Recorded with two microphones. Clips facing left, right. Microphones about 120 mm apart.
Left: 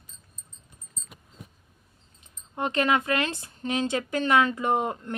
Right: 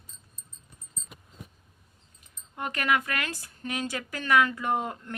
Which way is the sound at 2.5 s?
25° left (ahead or behind).